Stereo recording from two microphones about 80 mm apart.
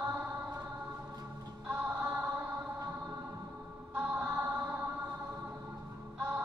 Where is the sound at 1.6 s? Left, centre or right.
Right.